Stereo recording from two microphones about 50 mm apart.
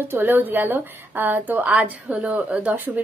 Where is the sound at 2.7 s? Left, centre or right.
Right.